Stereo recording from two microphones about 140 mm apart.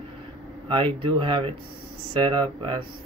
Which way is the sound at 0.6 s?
40° right (ahead or behind).